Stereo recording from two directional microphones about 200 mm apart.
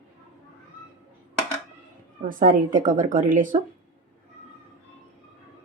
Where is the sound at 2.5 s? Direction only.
40° right (ahead or behind).